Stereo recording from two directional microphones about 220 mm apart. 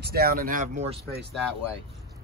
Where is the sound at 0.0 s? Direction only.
45° right (ahead or behind).